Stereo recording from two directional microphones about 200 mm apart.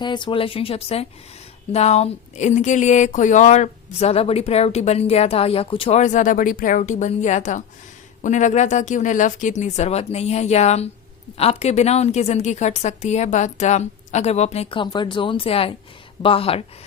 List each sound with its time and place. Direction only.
0.0 s speech: 25° left (ahead or behind)